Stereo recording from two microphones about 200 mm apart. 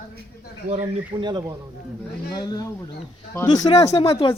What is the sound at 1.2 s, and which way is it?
Speech, 20° right (ahead or behind).